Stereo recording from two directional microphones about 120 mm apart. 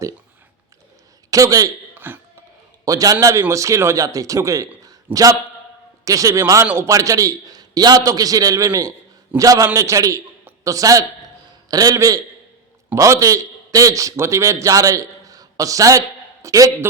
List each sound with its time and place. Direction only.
1.3 s a man's voice: 30° right (ahead or behind)
2.0 s speech: 15° right (ahead or behind)
2.8 s a man's voice: 30° right (ahead or behind)